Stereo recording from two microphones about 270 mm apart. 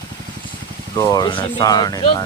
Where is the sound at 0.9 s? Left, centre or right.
Centre.